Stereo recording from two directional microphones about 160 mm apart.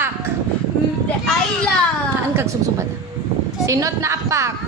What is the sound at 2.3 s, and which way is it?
A woman's voice, 15° right (ahead or behind).